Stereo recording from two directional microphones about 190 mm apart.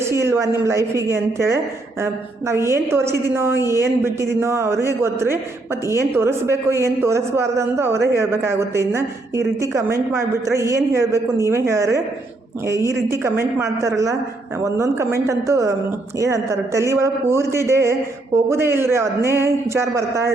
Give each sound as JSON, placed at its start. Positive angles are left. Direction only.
{"t": 0.0, "sound": "speech", "side_deg": -15}